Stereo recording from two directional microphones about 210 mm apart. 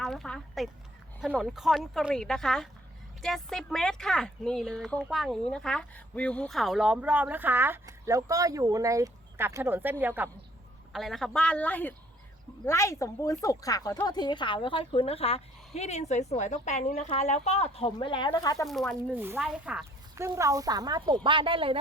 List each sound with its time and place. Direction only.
0.0 s speech: centre (ahead or behind)
10.9 s speech: centre (ahead or behind); by 18.6 s 20° left (ahead or behind)
18.6 s speech: centre (ahead or behind); by 21.8 s 25° right (ahead or behind)